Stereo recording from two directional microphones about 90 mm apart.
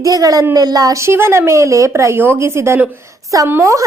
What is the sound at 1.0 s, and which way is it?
A woman's voice, 30° right (ahead or behind).